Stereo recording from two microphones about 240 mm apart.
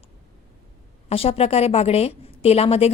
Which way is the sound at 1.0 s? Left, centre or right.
Left.